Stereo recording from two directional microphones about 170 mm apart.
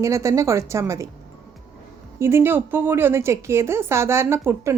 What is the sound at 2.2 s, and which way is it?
A woman's voice, 15° right (ahead or behind).